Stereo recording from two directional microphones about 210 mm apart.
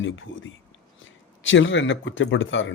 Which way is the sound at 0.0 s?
65° left (ahead or behind).